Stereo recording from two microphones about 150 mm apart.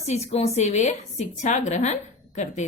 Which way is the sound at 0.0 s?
45° left (ahead or behind).